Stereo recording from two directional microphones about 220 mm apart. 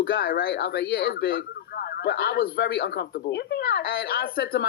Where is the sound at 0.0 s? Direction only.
45° left (ahead or behind).